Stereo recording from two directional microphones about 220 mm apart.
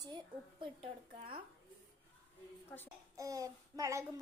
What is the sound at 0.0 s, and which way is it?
Speech, 20° right (ahead or behind).